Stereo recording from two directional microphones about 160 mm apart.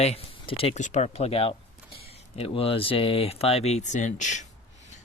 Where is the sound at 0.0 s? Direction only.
40° left (ahead or behind).